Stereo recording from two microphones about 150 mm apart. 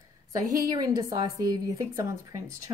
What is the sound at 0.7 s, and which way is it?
A woman's voice, 25° right (ahead or behind).